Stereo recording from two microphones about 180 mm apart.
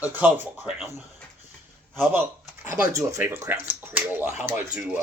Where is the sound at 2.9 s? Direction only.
15° right (ahead or behind).